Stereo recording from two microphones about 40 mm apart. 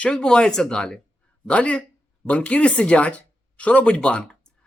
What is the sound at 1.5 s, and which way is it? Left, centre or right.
Speech, left.